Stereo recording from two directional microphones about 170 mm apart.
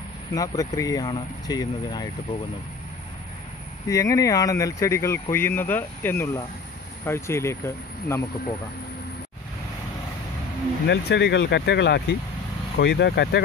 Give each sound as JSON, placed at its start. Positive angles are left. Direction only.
{"t": 0.3, "sound": "speech", "side_deg": 20}
{"t": 3.9, "sound": "speech", "side_deg": 20}
{"t": 10.9, "sound": "speech", "side_deg": 85}